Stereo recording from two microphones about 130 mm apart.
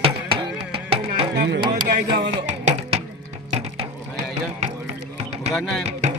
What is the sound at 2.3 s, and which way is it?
Music, 55° right (ahead or behind).